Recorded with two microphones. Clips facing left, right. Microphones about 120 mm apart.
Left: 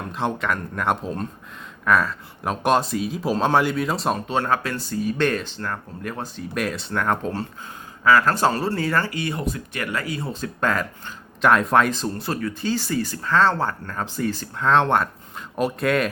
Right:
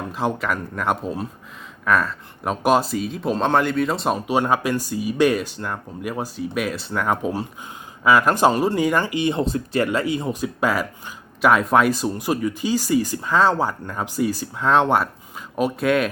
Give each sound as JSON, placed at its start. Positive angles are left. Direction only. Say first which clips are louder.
{"t": 0.1, "sound": "speech", "louder": "even", "side_deg": -5}
{"t": 4.3, "sound": "speech", "louder": "right 3 dB", "side_deg": -15}